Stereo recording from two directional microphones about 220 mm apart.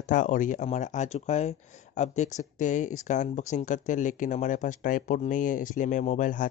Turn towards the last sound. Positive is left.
turn(degrees=35)  # may be behind; listen again after turning